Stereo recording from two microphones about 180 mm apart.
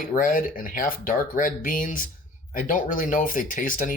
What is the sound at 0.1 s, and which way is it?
Speech, 50° left (ahead or behind).